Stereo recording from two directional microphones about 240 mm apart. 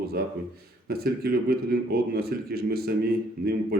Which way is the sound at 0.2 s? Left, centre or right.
Right.